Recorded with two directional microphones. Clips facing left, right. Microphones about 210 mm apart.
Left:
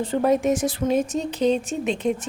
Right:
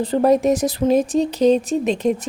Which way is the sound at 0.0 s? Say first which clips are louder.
Right 4 dB; 35° right (ahead or behind).